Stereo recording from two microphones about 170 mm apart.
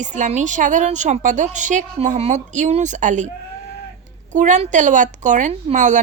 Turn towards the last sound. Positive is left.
turn(degrees=-45)  # may be behind; listen again after turning